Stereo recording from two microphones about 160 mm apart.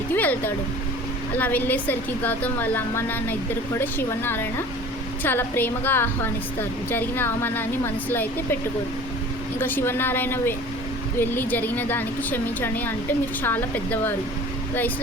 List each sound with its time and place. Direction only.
0.1 s a sound: 10° left (ahead or behind)
1.4 s a woman's voice: 10° left (ahead or behind)
9.6 s a woman's voice: 15° left (ahead or behind)